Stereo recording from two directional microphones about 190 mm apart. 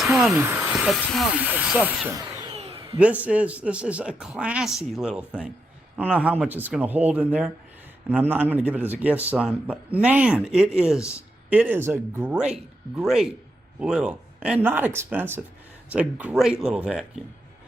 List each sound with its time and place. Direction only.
0.3 s a man's voice: 10° right (ahead or behind)
2.5 s a sound: 30° right (ahead or behind)
3.0 s a man's voice: 5° right (ahead or behind)